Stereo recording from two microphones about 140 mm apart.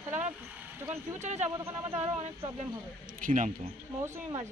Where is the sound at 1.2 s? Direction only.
55° right (ahead or behind).